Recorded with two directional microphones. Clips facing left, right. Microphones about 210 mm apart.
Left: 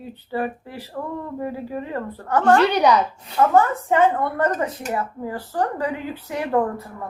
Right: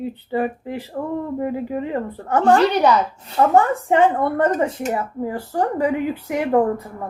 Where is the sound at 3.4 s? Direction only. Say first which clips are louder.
Right 1 dB; 25° right (ahead or behind).